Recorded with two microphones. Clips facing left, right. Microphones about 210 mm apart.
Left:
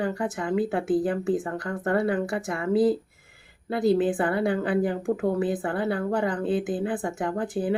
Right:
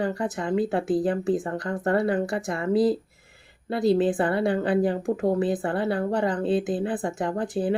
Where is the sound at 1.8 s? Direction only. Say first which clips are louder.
Right 1 dB; 35° right (ahead or behind).